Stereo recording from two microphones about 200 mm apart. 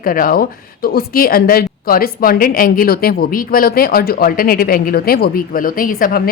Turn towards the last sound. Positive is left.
turn(degrees=45)  # may be behind; listen again after turning